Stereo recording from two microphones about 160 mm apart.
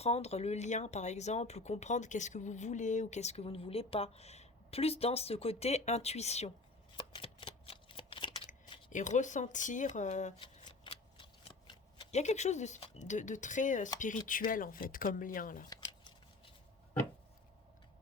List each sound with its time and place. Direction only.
0.0 s speech: 40° left (ahead or behind)
6.9 s shuffling cards: 35° left (ahead or behind)
8.9 s speech: 50° left (ahead or behind)
10.4 s shuffling cards: 30° left (ahead or behind)
12.1 s speech: 45° left (ahead or behind)
15.7 s a sound: 25° left (ahead or behind)